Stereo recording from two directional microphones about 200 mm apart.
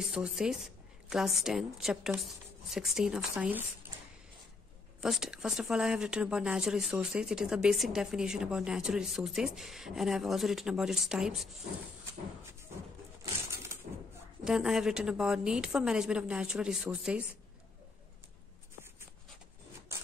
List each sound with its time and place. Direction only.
0.0 s speech: centre (ahead or behind)
5.0 s speech: centre (ahead or behind)
14.4 s speech: centre (ahead or behind)